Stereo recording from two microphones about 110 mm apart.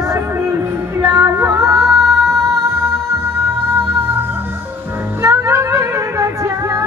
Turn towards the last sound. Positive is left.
turn(degrees=-25)  # may be behind; listen again after turning